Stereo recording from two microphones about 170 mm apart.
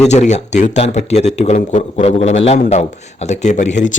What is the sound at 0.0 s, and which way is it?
Speech, 40° left (ahead or behind).